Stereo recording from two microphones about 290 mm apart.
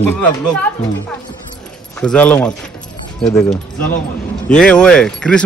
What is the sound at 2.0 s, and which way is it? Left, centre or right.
Speech, centre.